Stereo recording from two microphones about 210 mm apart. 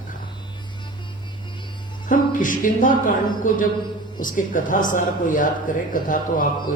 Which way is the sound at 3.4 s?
40° left (ahead or behind).